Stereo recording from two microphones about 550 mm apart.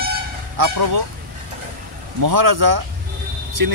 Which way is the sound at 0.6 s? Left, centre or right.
Right.